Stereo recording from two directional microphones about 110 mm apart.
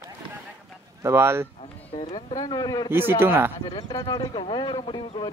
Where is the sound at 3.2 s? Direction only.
20° right (ahead or behind).